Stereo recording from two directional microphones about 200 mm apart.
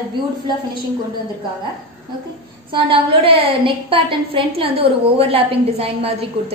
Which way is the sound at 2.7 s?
25° right (ahead or behind).